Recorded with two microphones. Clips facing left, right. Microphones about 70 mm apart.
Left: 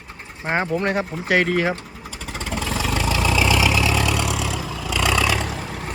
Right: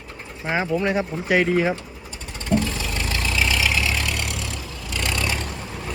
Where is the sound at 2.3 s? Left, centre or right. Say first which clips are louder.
Right 3 dB; left.